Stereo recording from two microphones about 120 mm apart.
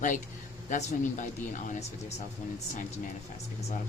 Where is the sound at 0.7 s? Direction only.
90° left.